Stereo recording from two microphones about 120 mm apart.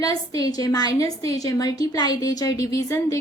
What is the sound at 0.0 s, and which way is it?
A woman's voice, 30° left (ahead or behind).